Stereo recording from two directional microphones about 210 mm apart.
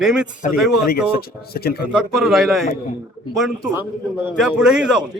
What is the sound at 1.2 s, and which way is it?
Speech, 50° left (ahead or behind).